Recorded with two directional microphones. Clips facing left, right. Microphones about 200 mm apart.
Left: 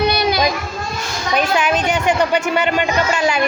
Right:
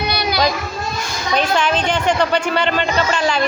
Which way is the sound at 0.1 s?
25° left (ahead or behind).